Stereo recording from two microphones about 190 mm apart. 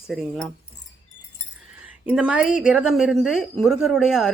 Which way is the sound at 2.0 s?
5° right (ahead or behind).